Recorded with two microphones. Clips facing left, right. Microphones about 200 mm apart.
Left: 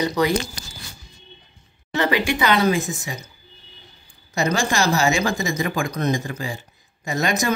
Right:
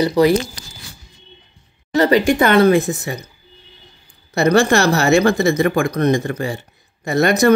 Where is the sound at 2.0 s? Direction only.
40° right (ahead or behind); by 3.2 s 60° right (ahead or behind).